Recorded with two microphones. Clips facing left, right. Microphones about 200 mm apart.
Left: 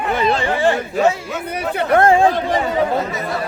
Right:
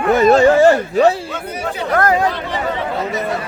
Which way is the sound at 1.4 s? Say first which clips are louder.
Left 3 dB; 60° left (ahead or behind).